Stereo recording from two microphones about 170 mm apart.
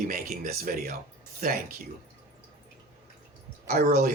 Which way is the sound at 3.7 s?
55° right (ahead or behind).